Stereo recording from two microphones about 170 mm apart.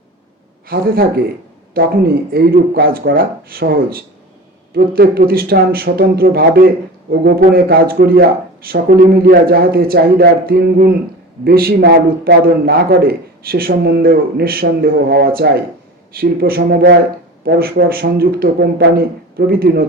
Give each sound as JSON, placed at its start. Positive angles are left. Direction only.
{"t": 0.7, "sound": "a man's voice", "side_deg": -60}